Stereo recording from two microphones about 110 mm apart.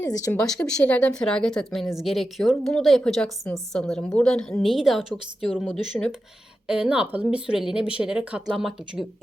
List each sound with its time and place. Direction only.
0.0 s speech: 30° left (ahead or behind)
0.3 s speech: 5° left (ahead or behind)
6.0 s speech: 10° left (ahead or behind)
6.7 s speech: 10° right (ahead or behind)